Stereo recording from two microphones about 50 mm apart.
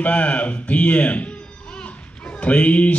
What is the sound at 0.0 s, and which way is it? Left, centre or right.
Speech, left.